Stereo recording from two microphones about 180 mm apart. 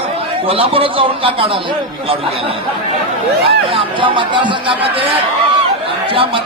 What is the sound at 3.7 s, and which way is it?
Speech, 30° right (ahead or behind).